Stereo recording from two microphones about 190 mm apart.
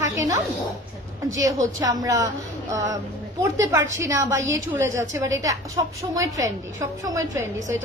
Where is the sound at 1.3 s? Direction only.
15° right (ahead or behind).